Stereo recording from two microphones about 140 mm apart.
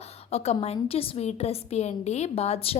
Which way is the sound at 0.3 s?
50° left (ahead or behind).